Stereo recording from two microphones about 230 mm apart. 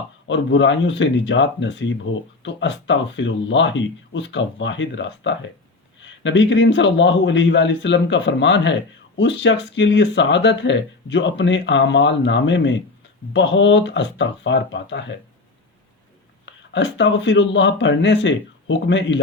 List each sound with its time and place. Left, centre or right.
0.3 s a man's voice: left
16.5 s a man's voice: left